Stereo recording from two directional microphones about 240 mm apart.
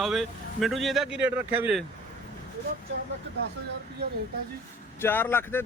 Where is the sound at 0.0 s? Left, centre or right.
Centre.